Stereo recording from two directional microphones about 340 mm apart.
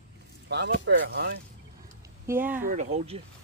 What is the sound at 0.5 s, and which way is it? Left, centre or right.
Speech, right.